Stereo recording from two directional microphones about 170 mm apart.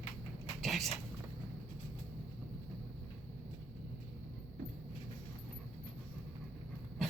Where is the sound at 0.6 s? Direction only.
Centre (ahead or behind).